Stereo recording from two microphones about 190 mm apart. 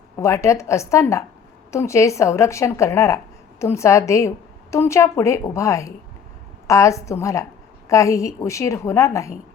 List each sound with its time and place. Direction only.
0.2 s a woman's voice: 15° left (ahead or behind)